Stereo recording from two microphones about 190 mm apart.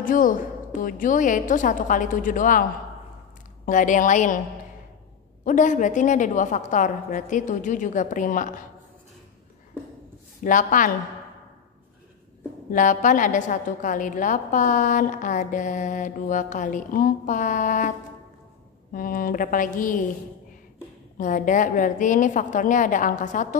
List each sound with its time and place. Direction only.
0.0 s a woman's voice: 45° left (ahead or behind)
3.6 s a woman's voice: 40° left (ahead or behind)
5.4 s a woman's voice: 40° left (ahead or behind)
10.4 s a woman's voice: 45° left (ahead or behind)
12.7 s a woman's voice: 45° left (ahead or behind)
18.9 s a woman's voice: 50° left (ahead or behind)
21.2 s a woman's voice: 45° left (ahead or behind)